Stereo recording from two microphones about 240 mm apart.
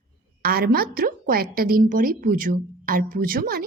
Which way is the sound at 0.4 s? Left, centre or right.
Right.